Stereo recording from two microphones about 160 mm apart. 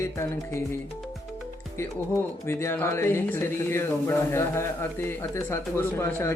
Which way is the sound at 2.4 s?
15° left (ahead or behind).